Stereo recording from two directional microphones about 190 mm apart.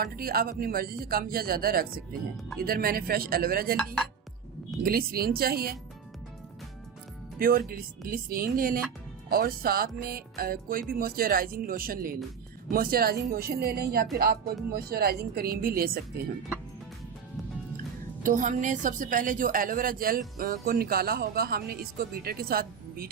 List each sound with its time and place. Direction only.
0.0 s a woman's voice: 50° right (ahead or behind)
4.9 s a woman's voice: 50° right (ahead or behind)
7.3 s a woman's voice: 50° right (ahead or behind)
18.2 s a woman's voice: 45° right (ahead or behind)